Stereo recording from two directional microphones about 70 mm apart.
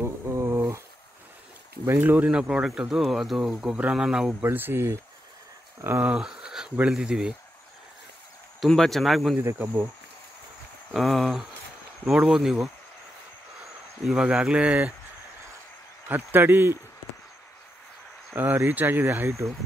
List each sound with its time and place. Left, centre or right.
0.0 s a sound: right
1.9 s speech: right
2.3 s speech: centre
4.3 s speech: right
5.9 s speech: right
6.1 s speech: centre
8.5 s speech: centre
9.4 s speech: right
10.9 s speech: centre
14.1 s speech: centre
16.1 s speech: right
18.3 s speech: right